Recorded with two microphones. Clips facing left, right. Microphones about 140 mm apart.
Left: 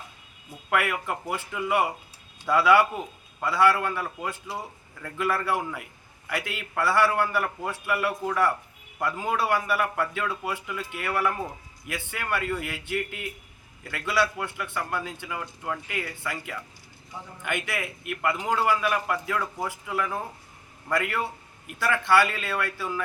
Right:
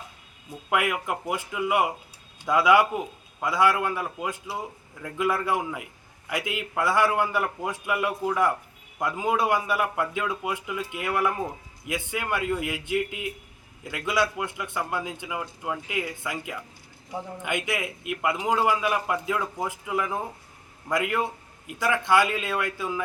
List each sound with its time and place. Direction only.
0.7 s a man's voice: 15° right (ahead or behind)